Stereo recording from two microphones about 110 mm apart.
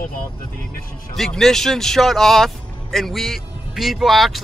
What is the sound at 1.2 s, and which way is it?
Speech, 5° left (ahead or behind).